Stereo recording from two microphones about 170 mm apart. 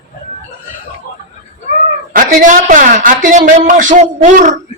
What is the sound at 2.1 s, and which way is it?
A woman's voice, 50° right (ahead or behind).